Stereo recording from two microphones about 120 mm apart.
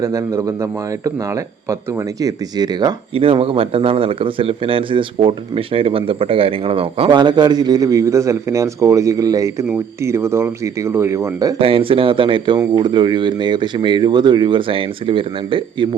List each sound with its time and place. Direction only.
0.0 s speech: 25° right (ahead or behind)
3.2 s a man's voice: 50° right (ahead or behind)
7.2 s speech: 40° right (ahead or behind)
11.5 s a man's voice: 50° right (ahead or behind)